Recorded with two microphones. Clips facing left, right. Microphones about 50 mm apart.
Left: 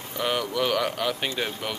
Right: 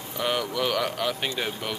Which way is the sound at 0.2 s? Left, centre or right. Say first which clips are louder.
Left 1 dB; centre.